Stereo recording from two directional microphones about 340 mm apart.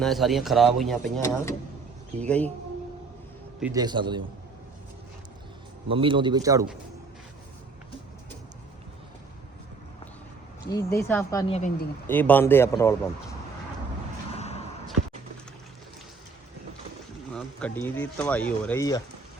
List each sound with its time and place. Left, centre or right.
0.0 s speech: centre
3.6 s a man's voice: centre
5.9 s a man's voice: centre
10.8 s a woman's voice: centre
12.0 s a woman's voice: centre
14.3 s basketball bounce: centre
17.3 s speech: centre